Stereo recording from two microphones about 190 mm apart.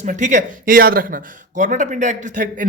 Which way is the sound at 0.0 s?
40° right (ahead or behind).